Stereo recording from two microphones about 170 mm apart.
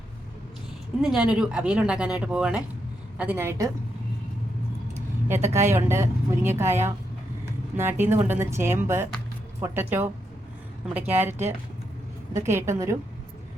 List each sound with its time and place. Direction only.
1.0 s speech: 5° right (ahead or behind)
4.9 s speech: 15° right (ahead or behind)